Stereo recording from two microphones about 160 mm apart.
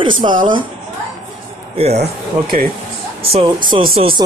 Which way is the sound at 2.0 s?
70° right (ahead or behind).